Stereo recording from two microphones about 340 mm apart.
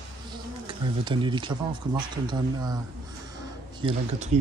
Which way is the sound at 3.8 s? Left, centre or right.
Centre.